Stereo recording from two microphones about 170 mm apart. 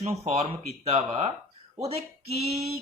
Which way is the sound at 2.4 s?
35° right (ahead or behind).